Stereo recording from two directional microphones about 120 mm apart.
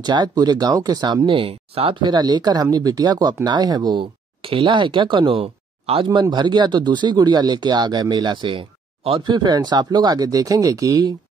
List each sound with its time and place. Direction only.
0.0 s speech: 35° right (ahead or behind)
1.3 s speech: 50° right (ahead or behind)
2.0 s speech: 35° right (ahead or behind)
4.4 s speech: 50° right (ahead or behind)
6.0 s speech: 40° right (ahead or behind)
9.3 s speech: 35° right (ahead or behind)